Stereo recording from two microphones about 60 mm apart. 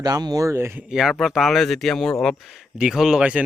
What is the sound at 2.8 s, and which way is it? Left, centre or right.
Speech, centre.